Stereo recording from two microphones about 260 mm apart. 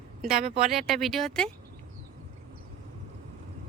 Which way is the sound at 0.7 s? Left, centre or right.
Centre.